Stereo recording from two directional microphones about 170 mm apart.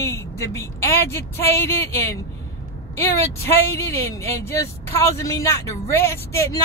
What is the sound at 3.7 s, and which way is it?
Speech, 20° left (ahead or behind).